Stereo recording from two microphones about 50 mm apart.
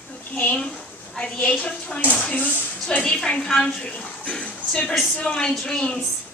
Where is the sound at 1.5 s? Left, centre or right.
Left.